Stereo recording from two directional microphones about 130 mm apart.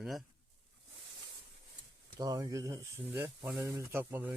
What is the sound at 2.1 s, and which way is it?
Speech, 30° right (ahead or behind).